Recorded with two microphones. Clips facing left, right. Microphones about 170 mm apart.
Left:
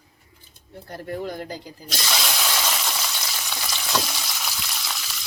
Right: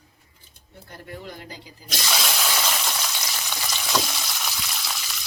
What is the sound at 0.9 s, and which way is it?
Speech, 45° left (ahead or behind).